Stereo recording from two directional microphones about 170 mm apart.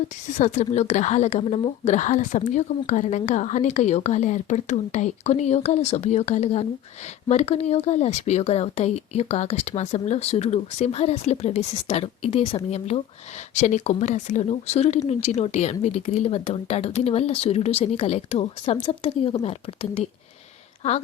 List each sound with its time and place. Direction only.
0.3 s a woman's voice: 40° left (ahead or behind)